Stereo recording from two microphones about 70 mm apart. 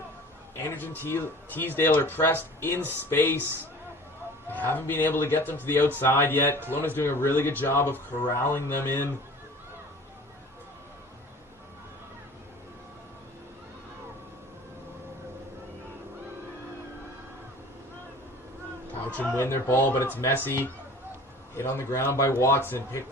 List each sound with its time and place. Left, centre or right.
0.7 s speech: left
4.5 s a man's voice: left
19.4 s speech: left